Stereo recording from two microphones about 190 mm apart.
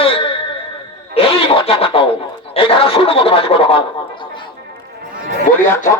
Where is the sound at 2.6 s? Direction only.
30° left (ahead or behind).